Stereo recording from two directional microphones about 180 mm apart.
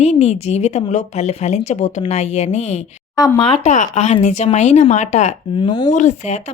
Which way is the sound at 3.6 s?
40° left (ahead or behind).